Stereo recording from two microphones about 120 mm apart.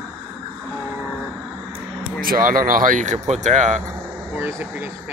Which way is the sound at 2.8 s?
90° right.